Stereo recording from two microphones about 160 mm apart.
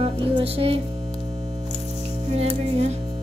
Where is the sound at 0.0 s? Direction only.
35° right (ahead or behind).